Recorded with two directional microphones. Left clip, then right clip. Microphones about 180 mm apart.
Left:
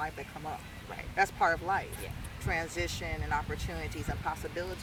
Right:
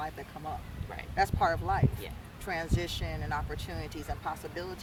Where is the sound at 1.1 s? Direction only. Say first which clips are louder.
Even; 20° right (ahead or behind).